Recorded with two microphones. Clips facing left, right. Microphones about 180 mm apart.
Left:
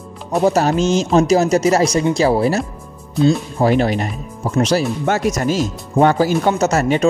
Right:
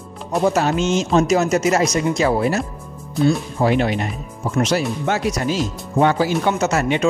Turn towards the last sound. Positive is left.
turn(degrees=40)  # may be behind; listen again after turning